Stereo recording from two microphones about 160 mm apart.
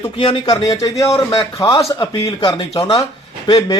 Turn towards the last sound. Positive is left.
turn(degrees=25)  # may be behind; listen again after turning